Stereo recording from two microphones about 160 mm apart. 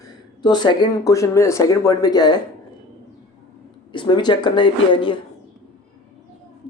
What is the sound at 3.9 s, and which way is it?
Speech, 25° left (ahead or behind).